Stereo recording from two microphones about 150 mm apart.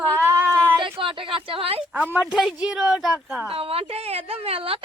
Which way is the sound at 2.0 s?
5° right (ahead or behind).